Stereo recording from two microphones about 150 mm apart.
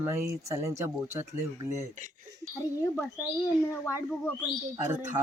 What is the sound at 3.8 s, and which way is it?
Speech, 20° left (ahead or behind).